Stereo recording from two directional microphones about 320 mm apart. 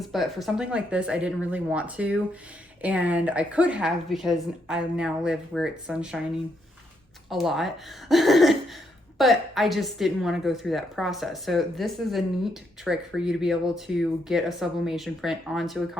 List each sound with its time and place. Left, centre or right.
0.0 s a woman's voice: centre
7.3 s a woman's voice: centre